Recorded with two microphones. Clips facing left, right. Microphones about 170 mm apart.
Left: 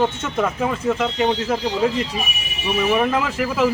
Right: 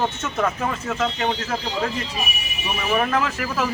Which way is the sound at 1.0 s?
15° left (ahead or behind).